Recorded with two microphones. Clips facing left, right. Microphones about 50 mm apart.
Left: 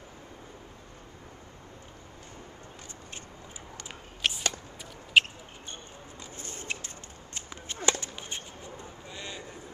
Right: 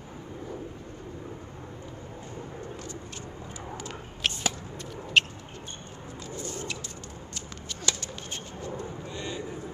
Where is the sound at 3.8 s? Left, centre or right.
Centre.